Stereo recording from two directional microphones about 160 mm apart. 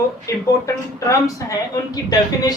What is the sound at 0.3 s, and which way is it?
Speech, 20° left (ahead or behind).